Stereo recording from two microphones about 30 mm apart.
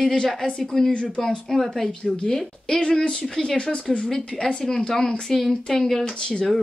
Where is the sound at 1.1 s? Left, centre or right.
Centre.